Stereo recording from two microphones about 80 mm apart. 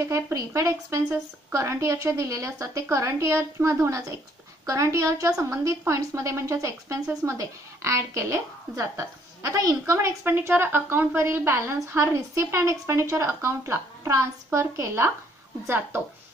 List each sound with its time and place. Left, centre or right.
0.1 s a woman's voice: right
9.9 s a woman's voice: right